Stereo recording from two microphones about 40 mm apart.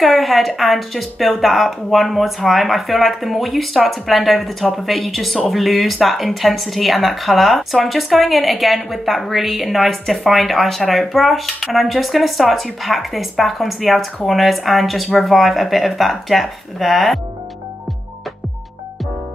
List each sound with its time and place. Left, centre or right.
0.0 s speech: centre